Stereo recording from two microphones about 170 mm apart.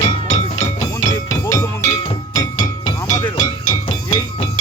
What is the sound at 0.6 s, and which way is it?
Music, 15° left (ahead or behind).